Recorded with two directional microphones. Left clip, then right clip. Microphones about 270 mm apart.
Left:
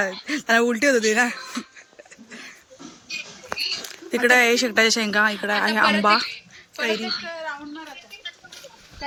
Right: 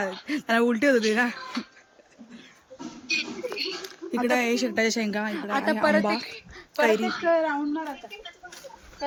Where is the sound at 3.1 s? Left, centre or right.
Right.